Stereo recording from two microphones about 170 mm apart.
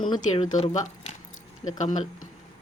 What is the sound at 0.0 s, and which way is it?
Speech, 25° left (ahead or behind).